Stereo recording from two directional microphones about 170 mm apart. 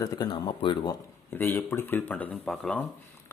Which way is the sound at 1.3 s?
10° left (ahead or behind).